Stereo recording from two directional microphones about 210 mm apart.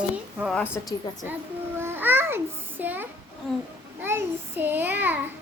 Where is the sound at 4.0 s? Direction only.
10° right (ahead or behind).